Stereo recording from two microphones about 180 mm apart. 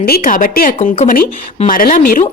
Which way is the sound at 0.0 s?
50° left (ahead or behind).